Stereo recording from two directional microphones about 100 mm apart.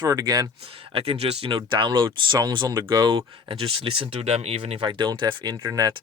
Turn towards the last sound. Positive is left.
turn(degrees=-35)  # may be behind; listen again after turning